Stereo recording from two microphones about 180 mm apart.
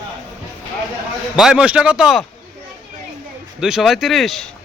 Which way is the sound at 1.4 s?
5° right (ahead or behind).